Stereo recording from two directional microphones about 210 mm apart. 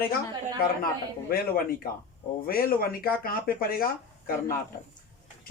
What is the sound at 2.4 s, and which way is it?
Speech, 45° left (ahead or behind).